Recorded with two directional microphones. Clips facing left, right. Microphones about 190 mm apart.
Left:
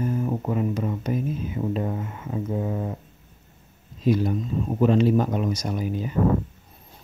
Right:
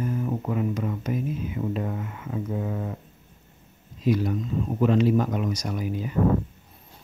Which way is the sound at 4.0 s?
25° left (ahead or behind).